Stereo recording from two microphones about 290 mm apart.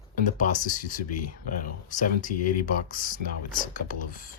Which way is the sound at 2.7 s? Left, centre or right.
Left.